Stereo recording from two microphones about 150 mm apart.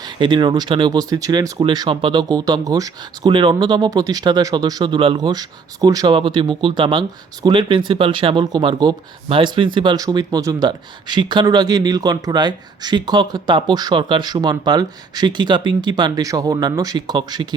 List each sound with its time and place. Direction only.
0.0 s speech: 30° right (ahead or behind)